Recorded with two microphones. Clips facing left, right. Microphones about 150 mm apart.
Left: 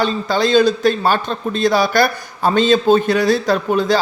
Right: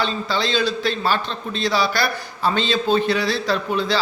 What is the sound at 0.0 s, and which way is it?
A man's voice, 45° left (ahead or behind).